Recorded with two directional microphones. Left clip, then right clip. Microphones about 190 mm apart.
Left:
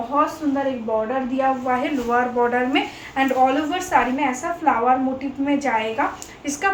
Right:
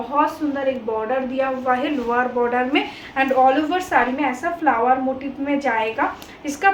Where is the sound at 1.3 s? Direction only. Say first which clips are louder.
Left 2 dB; 15° right (ahead or behind).